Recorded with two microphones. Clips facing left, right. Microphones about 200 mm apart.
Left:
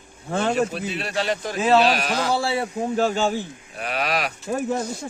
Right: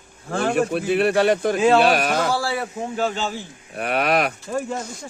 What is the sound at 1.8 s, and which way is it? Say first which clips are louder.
Speech: right 3 dB; 50° right (ahead or behind).